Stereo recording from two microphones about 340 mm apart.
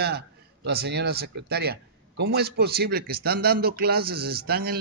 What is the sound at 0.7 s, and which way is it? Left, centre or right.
Speech, right.